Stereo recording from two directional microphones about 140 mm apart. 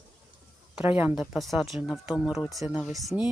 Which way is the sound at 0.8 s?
10° right (ahead or behind).